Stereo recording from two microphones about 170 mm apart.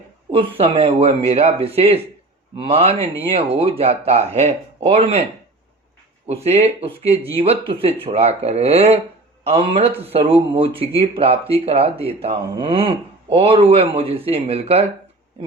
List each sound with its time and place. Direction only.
0.3 s a man's voice: 30° right (ahead or behind)
6.2 s a man's voice: 40° right (ahead or behind)